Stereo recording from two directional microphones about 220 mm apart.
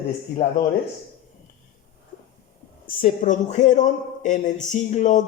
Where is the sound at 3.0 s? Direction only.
35° left (ahead or behind).